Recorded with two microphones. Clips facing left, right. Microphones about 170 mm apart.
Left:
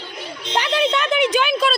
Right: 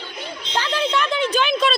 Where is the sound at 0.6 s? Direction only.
20° left (ahead or behind).